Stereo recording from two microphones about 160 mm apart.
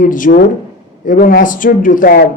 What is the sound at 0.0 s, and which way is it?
A woman's voice, 55° left (ahead or behind).